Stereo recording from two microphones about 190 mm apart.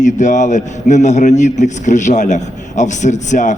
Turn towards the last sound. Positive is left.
turn(degrees=40)  # may be behind; listen again after turning